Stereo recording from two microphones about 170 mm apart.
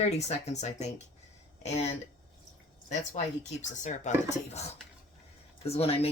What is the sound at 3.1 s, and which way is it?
Speech, 45° left (ahead or behind).